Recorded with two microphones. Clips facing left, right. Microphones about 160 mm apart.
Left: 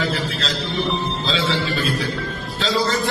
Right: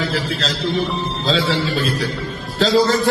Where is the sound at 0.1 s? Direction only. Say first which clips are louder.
Right 2 dB; 40° right (ahead or behind).